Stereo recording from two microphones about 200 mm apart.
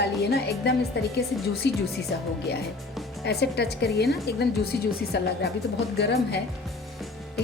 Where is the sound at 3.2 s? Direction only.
55° left (ahead or behind).